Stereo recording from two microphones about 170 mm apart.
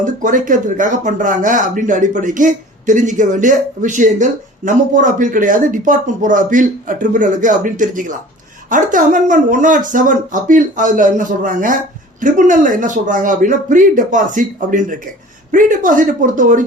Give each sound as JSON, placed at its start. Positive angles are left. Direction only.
{"t": 0.0, "sound": "speech", "side_deg": -50}